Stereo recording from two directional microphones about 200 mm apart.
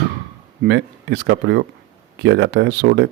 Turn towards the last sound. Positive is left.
turn(degrees=-60)  # may be behind; listen again after turning